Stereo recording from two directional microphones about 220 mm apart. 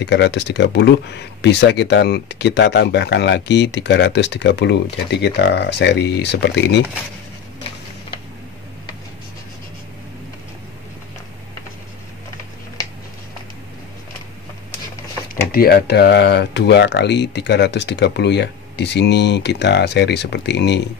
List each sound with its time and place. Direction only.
0.0 s speech: 55° left (ahead or behind)
15.5 s speech: 45° left (ahead or behind)